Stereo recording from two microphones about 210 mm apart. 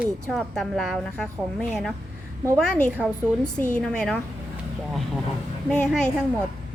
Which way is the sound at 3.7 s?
5° left (ahead or behind).